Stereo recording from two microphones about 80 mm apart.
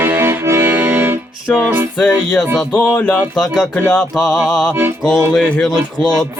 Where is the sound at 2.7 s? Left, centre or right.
Centre.